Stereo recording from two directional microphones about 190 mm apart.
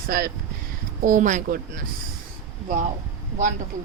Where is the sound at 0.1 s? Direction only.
50° right (ahead or behind).